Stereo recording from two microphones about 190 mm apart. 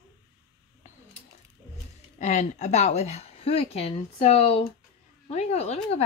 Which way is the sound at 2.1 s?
40° left (ahead or behind).